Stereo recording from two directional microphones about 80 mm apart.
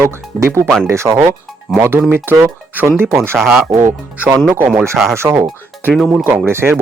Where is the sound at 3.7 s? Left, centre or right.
Right.